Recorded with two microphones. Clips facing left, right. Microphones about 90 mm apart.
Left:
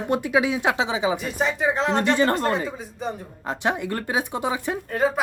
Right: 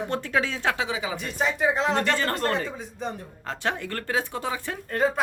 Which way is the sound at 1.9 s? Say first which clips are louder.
Left 5 dB; 20° left (ahead or behind).